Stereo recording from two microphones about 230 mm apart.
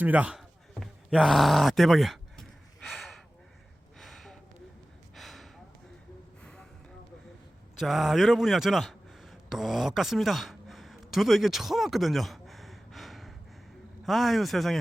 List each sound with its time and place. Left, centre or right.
0.0 s a sound: centre
6.4 s gasp: centre
7.8 s a man's voice: centre